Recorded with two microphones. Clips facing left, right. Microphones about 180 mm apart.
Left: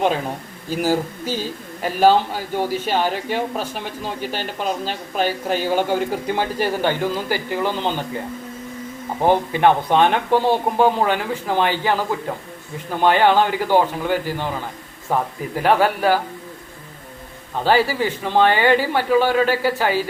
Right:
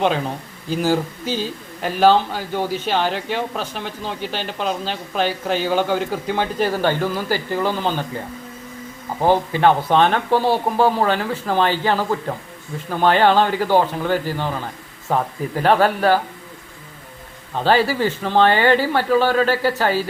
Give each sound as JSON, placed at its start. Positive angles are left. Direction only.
{"t": 0.7, "sound": "speech", "side_deg": 10}
{"t": 9.5, "sound": "speech", "side_deg": 15}
{"t": 15.6, "sound": "speech", "side_deg": 10}
{"t": 17.6, "sound": "speech", "side_deg": 10}